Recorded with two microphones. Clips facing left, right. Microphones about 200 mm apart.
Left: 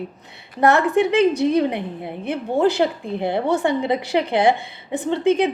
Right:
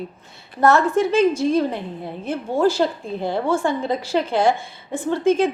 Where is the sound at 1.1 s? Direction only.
65° left (ahead or behind).